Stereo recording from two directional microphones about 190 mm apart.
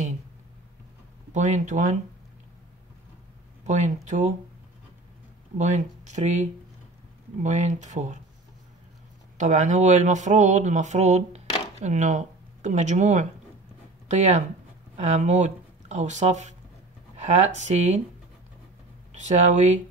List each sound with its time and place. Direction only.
1.3 s speech: 40° right (ahead or behind)
3.6 s speech: 40° right (ahead or behind)
5.6 s speech: 40° right (ahead or behind)
9.4 s speech: 40° right (ahead or behind)
19.1 s speech: 40° right (ahead or behind)